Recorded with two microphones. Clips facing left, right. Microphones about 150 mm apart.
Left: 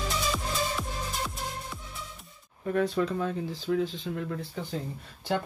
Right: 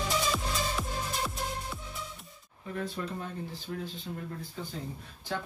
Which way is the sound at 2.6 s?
75° left (ahead or behind).